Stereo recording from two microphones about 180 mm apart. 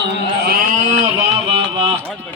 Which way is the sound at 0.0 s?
55° right (ahead or behind).